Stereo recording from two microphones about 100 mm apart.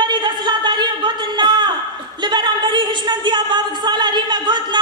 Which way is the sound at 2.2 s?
50° right (ahead or behind).